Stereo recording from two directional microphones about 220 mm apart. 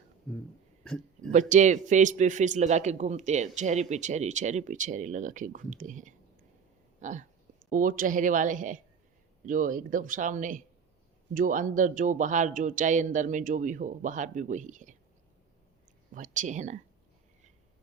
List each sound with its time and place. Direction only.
0.3 s speech: 5° left (ahead or behind)
1.3 s a man's voice: 35° right (ahead or behind)
16.1 s a man's voice: 35° right (ahead or behind)